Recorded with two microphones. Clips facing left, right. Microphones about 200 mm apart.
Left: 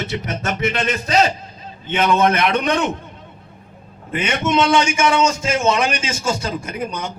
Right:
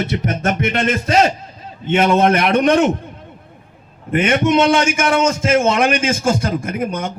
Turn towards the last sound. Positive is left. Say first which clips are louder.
# right 4 dB
turn(degrees=-50)  # may be behind; listen again after turning